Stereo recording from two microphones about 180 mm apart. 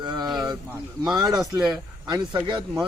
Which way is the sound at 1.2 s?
20° right (ahead or behind).